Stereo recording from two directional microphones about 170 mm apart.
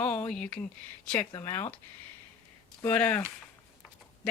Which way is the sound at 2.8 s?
10° left (ahead or behind).